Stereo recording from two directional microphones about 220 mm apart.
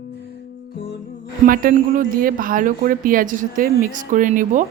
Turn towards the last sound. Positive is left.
turn(degrees=-35)  # may be behind; listen again after turning